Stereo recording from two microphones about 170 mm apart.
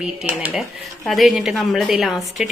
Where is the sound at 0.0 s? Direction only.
5° right (ahead or behind).